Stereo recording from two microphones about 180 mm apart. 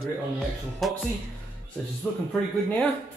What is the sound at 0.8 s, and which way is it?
Speech, centre (ahead or behind).